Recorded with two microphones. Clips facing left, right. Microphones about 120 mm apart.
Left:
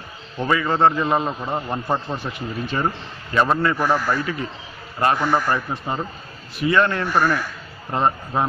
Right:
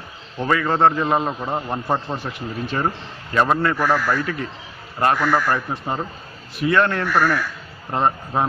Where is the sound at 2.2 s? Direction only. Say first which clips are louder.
Even; 5° left (ahead or behind).